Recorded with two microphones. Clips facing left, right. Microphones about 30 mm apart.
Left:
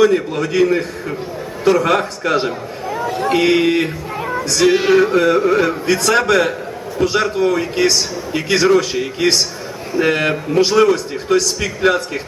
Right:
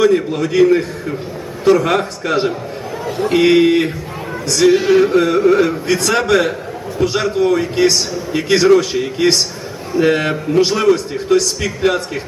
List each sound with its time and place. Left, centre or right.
0.0 s a man's voice: centre
4.7 s music: left
4.9 s a man's voice: centre